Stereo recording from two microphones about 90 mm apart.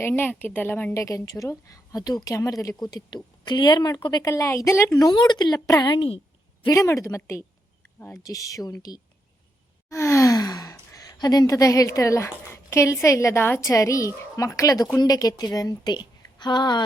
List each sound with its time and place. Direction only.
0.1 s speech: 20° left (ahead or behind)
0.9 s a woman's voice: 35° left (ahead or behind)
2.8 s a woman's voice: 50° left (ahead or behind); by 4.9 s 30° left (ahead or behind)
4.9 s a woman's voice: 50° left (ahead or behind)
7.9 s speech: 25° left (ahead or behind)
8.2 s a woman's voice: 40° left (ahead or behind)
9.9 s sigh: 35° left (ahead or behind)
11.9 s a woman's voice: 35° left (ahead or behind)
13.6 s a woman's voice: 35° left (ahead or behind); by 16.8 s 55° left (ahead or behind)